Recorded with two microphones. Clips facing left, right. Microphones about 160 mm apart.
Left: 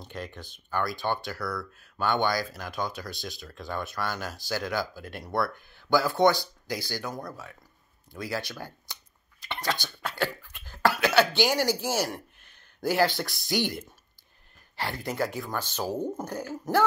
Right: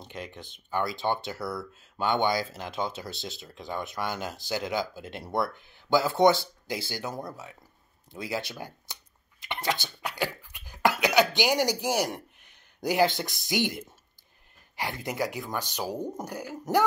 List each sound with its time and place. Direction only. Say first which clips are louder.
0.0 s speech: left 1 dB; 20° right (ahead or behind)